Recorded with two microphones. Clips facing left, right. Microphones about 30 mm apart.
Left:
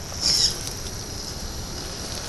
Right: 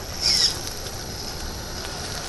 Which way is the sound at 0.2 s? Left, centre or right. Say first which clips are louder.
Right 1 dB; centre.